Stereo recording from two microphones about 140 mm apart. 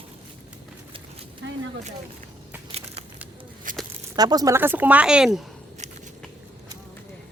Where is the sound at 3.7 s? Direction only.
75° right (ahead or behind).